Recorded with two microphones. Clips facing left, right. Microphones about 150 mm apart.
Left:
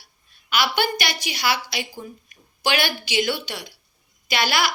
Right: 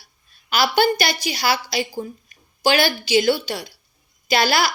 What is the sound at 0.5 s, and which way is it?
A woman's voice, 35° right (ahead or behind).